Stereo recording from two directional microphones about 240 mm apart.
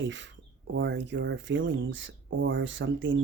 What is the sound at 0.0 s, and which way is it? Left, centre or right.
Speech, right.